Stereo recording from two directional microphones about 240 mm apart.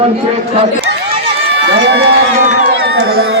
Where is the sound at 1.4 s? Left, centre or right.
Right.